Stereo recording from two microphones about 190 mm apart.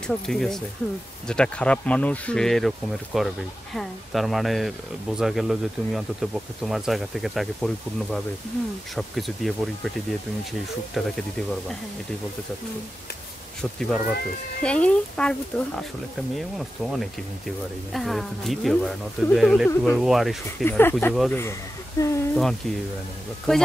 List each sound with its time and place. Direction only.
0.0 s speech: 5° left (ahead or behind)
10.9 s speech: centre (ahead or behind)
13.6 s speech: centre (ahead or behind)
20.6 s speech: 10° left (ahead or behind)
21.1 s speech: centre (ahead or behind)
22.0 s speech: 15° left (ahead or behind)
22.3 s speech: centre (ahead or behind)